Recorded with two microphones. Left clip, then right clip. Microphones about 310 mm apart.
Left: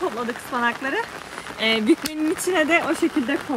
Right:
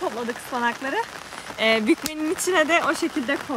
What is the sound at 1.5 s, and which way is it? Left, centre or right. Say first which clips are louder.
Speech: even; right.